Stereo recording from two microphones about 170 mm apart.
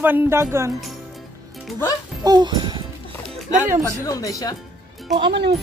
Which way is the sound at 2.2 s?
25° right (ahead or behind).